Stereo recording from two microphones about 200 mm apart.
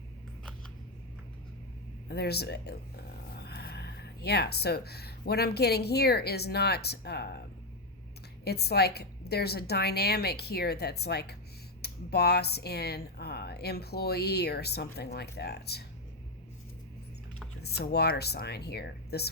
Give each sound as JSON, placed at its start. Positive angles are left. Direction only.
{"t": 2.0, "sound": "speech", "side_deg": 55}
{"t": 8.4, "sound": "speech", "side_deg": 55}
{"t": 17.6, "sound": "speech", "side_deg": 55}